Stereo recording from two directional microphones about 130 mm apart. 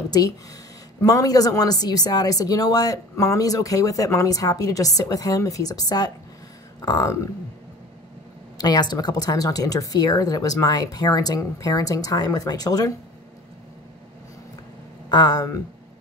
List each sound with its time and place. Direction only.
1.0 s a woman's voice: 30° left (ahead or behind)
8.5 s a woman's voice: 30° left (ahead or behind)
15.0 s speech: 35° left (ahead or behind)